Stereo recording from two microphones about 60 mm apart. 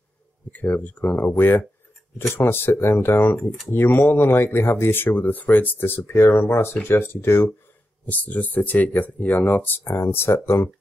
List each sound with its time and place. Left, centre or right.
0.5 s speech: left
8.0 s speech: left
9.8 s speech: left